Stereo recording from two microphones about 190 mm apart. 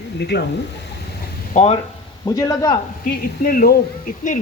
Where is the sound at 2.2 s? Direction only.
20° left (ahead or behind).